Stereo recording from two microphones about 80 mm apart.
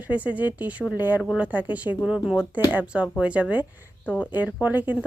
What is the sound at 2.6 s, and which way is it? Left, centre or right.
Speech, right.